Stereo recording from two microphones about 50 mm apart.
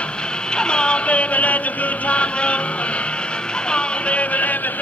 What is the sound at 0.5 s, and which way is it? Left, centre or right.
Music, centre.